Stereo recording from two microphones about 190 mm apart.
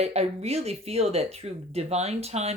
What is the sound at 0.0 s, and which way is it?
Speech, 35° right (ahead or behind).